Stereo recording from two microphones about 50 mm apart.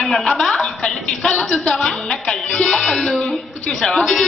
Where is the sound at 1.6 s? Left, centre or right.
Centre.